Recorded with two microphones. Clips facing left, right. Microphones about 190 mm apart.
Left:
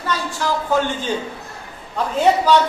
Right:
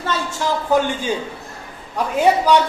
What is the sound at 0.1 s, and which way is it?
Speech, 25° right (ahead or behind).